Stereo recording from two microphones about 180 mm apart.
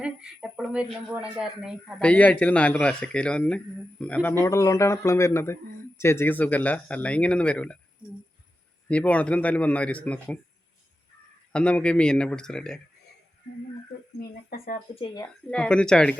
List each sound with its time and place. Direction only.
0.0 s speech: 5° right (ahead or behind)
8.9 s speech: 5° left (ahead or behind)
11.5 s speech: 5° left (ahead or behind)
14.2 s speech: 55° left (ahead or behind)
14.9 s speech: 25° left (ahead or behind)
15.4 s speech: 5° left (ahead or behind)